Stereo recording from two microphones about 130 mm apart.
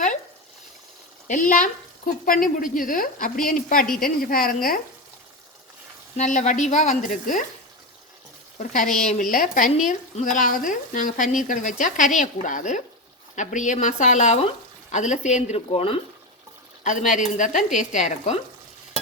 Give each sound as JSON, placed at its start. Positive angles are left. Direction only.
{"t": 1.3, "sound": "speech", "side_deg": 80}
{"t": 6.1, "sound": "speech", "side_deg": 65}
{"t": 8.5, "sound": "speech", "side_deg": 80}
{"t": 15.7, "sound": "speech", "side_deg": 45}
{"t": 16.8, "sound": "speech", "side_deg": 80}